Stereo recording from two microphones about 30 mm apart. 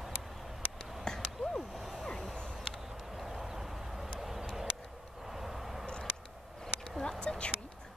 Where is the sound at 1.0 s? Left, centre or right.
Left.